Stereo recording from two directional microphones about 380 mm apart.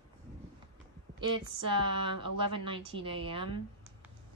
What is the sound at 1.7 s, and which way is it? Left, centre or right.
A woman's voice, centre.